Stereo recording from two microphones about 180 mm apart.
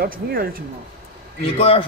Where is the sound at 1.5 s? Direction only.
35° left (ahead or behind).